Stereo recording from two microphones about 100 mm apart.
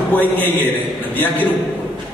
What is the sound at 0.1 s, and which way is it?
A man's voice, 15° left (ahead or behind).